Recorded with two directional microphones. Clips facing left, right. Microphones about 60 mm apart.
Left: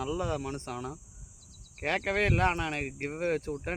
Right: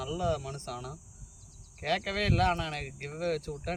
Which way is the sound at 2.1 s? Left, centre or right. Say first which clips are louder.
Left 2 dB; left.